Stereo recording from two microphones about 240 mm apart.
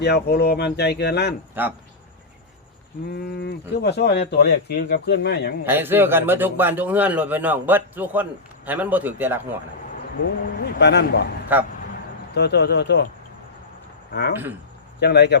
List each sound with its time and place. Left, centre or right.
0.0 s speech: left
3.1 s speech: left
5.6 s a man's voice: centre
10.6 s speech: left
11.5 s a man's voice: centre
12.3 s speech: left
14.1 s speech: left